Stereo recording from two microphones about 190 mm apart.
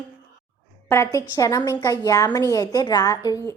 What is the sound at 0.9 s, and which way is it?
A woman's voice, 15° left (ahead or behind).